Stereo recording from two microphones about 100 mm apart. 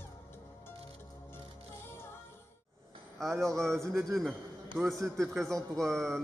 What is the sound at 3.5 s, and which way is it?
Speech, 5° left (ahead or behind).